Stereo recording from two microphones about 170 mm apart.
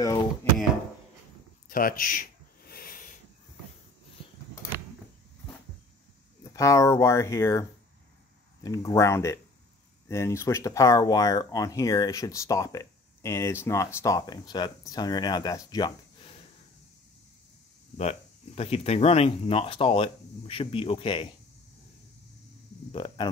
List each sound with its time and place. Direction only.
0.0 s speech: 20° left (ahead or behind)
1.7 s a sound: 55° left (ahead or behind)
6.5 s speech: 20° left (ahead or behind)
8.6 s speech: 20° left (ahead or behind)
17.9 s speech: 40° left (ahead or behind)
22.8 s speech: 30° left (ahead or behind)